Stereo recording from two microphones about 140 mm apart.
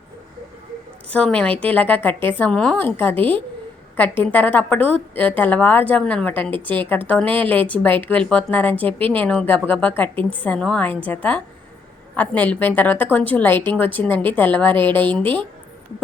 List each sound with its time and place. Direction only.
1.1 s a woman's voice: 10° left (ahead or behind)
8.9 s a woman's voice: 40° right (ahead or behind)
9.1 s a woman's voice: 10° left (ahead or behind)